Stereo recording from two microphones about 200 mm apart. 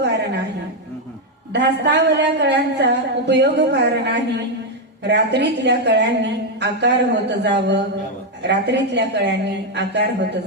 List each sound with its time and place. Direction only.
1.5 s a woman's voice: 60° right (ahead or behind)